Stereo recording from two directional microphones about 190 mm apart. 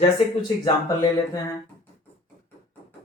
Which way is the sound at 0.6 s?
20° left (ahead or behind).